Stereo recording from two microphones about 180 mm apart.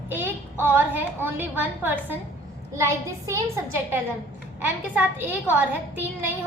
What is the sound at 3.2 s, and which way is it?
Speech, 15° right (ahead or behind).